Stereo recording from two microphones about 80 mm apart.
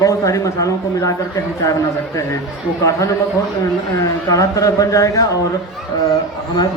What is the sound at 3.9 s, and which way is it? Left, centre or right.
A man's voice, left.